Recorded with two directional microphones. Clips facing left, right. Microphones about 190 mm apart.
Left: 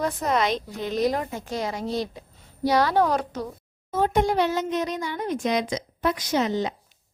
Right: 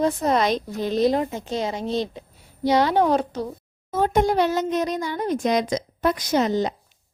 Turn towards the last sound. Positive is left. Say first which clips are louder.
# right 3 dB
turn(degrees=-40)  # may be behind; listen again after turning